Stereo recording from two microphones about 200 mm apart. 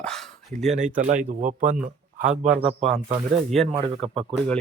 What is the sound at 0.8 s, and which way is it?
Speech, 40° right (ahead or behind).